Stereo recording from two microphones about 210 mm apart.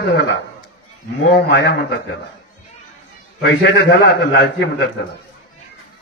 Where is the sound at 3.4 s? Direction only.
55° left (ahead or behind).